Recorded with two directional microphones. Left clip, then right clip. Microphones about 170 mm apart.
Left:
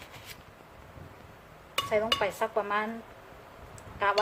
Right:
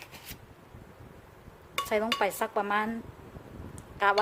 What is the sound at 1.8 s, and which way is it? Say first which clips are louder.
Speech: even; 65° right (ahead or behind).